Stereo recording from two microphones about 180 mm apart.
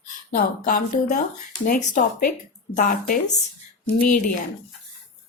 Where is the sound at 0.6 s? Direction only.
50° left (ahead or behind).